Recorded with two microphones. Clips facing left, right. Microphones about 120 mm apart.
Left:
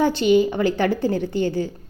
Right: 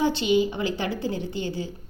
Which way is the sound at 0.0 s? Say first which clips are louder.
Left 5 dB; 50° left (ahead or behind).